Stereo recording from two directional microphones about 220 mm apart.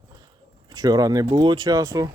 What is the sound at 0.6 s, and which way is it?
Speech, 20° right (ahead or behind).